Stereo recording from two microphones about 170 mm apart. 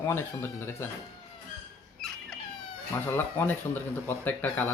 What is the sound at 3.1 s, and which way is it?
Speech, 10° left (ahead or behind).